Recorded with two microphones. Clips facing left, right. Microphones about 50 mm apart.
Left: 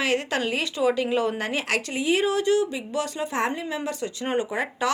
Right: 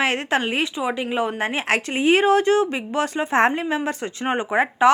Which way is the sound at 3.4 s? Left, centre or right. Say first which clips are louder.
Right 8 dB; right.